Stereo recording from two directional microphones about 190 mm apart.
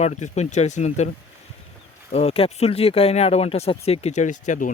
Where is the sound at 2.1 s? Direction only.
30° left (ahead or behind).